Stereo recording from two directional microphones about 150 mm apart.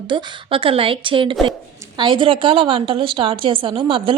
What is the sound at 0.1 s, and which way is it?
A woman's voice, 35° right (ahead or behind).